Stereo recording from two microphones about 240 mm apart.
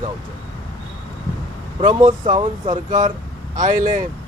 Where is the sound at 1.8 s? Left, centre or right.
Centre.